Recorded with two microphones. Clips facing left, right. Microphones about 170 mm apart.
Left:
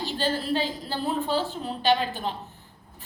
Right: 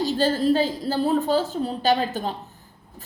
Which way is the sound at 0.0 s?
40° right (ahead or behind).